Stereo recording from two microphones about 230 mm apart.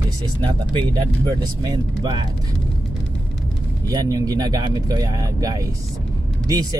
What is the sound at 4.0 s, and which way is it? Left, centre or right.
Speech, centre.